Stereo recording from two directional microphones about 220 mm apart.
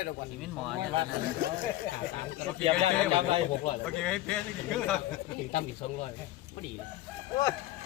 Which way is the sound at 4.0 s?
5° left (ahead or behind).